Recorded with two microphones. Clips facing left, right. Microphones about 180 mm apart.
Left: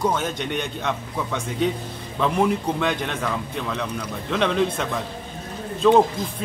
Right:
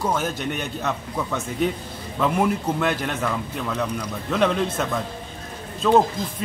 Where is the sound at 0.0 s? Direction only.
5° right (ahead or behind).